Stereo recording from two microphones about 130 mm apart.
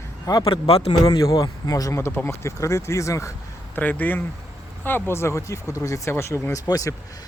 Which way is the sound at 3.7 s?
15° left (ahead or behind).